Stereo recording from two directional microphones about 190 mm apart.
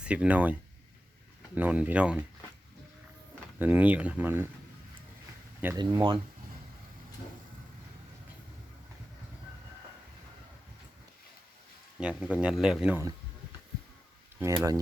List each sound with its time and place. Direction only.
0.0 s speech: 5° right (ahead or behind)
1.5 s speech: 10° right (ahead or behind)
3.6 s speech: 5° right (ahead or behind)
5.6 s speech: 20° right (ahead or behind)
11.9 s speech: 5° right (ahead or behind)
14.3 s speech: 15° right (ahead or behind)